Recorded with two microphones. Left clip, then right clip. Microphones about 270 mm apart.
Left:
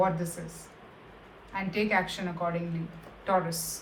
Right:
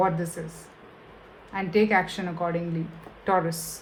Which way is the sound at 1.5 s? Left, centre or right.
Right.